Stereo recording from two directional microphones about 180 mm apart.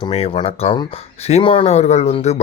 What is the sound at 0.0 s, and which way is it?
Speech, 30° left (ahead or behind).